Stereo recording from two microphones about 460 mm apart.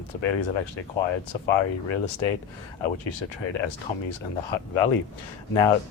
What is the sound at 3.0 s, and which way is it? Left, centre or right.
Speech, left.